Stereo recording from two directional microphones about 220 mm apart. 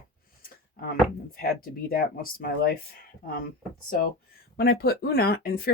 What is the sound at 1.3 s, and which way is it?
Speech, 40° left (ahead or behind).